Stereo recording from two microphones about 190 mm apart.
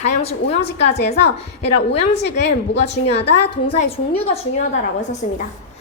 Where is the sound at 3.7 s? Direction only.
30° left (ahead or behind).